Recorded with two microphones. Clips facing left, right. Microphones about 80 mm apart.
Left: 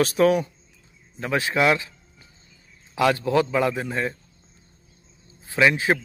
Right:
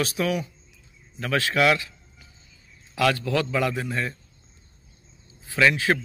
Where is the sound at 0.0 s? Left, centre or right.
Left.